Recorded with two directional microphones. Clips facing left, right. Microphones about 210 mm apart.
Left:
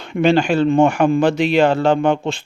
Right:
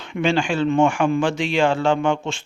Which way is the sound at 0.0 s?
40° left (ahead or behind).